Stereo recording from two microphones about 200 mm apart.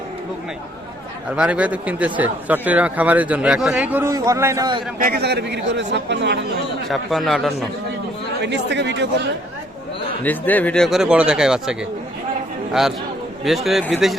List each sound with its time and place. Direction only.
1.4 s a man's voice: 5° right (ahead or behind)
5.0 s speech: 55° right (ahead or behind)
6.8 s speech: centre (ahead or behind)
8.4 s speech: 60° right (ahead or behind)
10.2 s speech: 10° left (ahead or behind)